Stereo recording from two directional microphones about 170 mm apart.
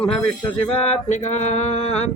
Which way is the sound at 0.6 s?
40° left (ahead or behind).